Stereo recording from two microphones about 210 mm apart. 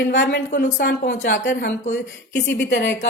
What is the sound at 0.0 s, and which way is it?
A woman's voice, 55° left (ahead or behind).